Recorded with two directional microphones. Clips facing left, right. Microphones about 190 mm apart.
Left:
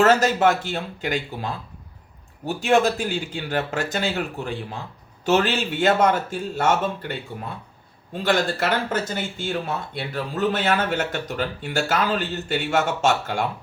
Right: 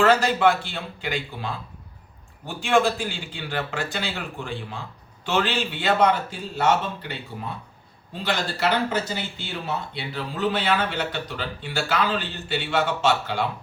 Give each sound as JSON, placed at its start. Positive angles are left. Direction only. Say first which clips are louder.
{"t": 0.0, "sound": "speech", "louder": "left 1 dB", "side_deg": 45}
{"t": 2.5, "sound": "speech", "louder": "left 2 dB", "side_deg": 40}